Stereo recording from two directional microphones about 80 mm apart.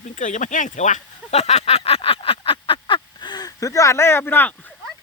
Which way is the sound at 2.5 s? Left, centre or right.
Left.